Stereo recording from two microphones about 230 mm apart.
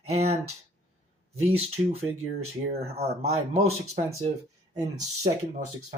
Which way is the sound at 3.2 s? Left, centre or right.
Right.